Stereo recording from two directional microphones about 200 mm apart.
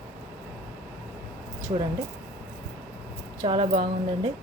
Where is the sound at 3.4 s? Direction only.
25° right (ahead or behind).